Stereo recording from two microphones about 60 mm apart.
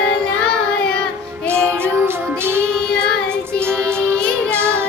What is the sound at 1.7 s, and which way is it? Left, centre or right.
Music, right.